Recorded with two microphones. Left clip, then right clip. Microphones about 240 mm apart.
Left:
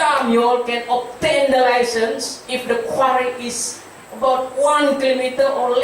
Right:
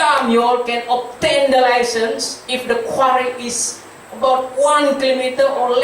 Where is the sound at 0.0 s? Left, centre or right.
Centre.